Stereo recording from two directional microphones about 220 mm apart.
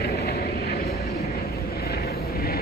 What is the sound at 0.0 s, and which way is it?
Vehicle, 45° left (ahead or behind).